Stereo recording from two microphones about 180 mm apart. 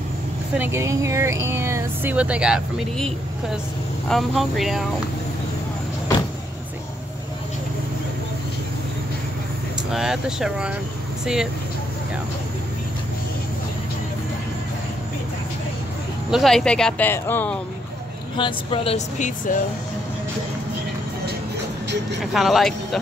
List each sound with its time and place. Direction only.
0.6 s speech: 15° right (ahead or behind)
9.8 s speech: 5° right (ahead or behind)
16.3 s speech: centre (ahead or behind)
18.3 s speech: 30° left (ahead or behind); by 19.6 s 45° left (ahead or behind)
22.2 s speech: centre (ahead or behind)